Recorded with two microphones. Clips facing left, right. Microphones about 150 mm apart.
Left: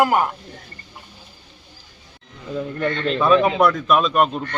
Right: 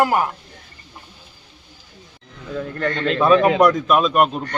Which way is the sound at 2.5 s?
15° left (ahead or behind).